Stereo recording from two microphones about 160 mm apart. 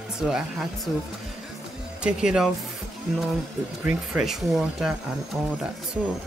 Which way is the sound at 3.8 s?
Centre (ahead or behind).